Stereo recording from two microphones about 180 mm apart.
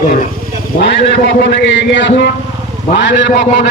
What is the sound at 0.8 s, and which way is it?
A man's voice, 70° left (ahead or behind).